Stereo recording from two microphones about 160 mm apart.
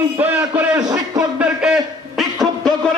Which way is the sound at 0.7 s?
25° right (ahead or behind).